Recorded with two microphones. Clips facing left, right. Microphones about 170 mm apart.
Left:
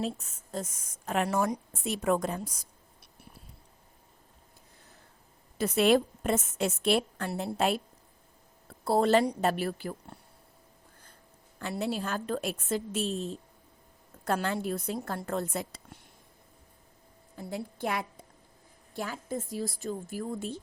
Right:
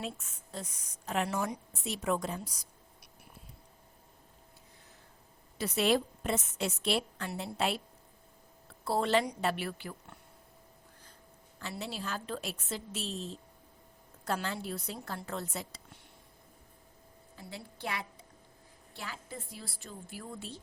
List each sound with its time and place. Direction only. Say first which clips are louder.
0.0 s a woman's voice: left 7 dB; 40° left (ahead or behind)
5.5 s a woman's voice: left 5 dB; 50° left (ahead or behind)
11.6 s a woman's voice: left 7 dB; 50° left (ahead or behind)
17.3 s a woman's voice: left 9 dB; 50° left (ahead or behind)